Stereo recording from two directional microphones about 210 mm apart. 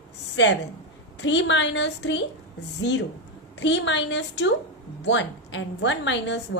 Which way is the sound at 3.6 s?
60° left (ahead or behind).